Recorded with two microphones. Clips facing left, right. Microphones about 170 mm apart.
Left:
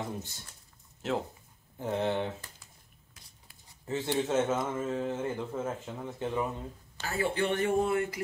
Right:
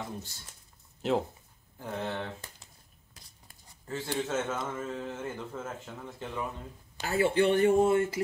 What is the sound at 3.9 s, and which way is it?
Speech, 20° left (ahead or behind).